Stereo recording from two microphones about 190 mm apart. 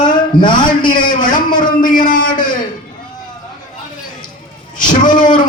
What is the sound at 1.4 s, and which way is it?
Speech, 25° left (ahead or behind).